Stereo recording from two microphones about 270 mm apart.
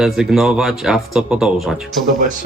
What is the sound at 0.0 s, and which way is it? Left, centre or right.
Speech, centre.